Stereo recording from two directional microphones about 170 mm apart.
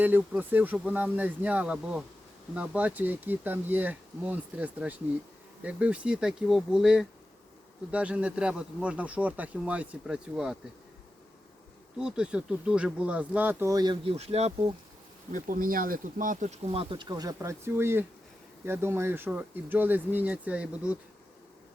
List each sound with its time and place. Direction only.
0.0 s speech: 10° right (ahead or behind)
11.9 s speech: 5° right (ahead or behind); by 14.7 s 35° right (ahead or behind)
15.3 s speech: 55° right (ahead or behind); by 21.0 s 5° right (ahead or behind)